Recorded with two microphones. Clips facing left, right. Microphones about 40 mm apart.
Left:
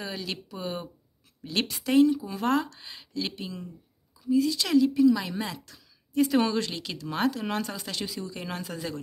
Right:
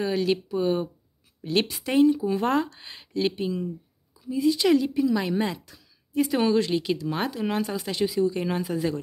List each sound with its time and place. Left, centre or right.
0.3 s speech: centre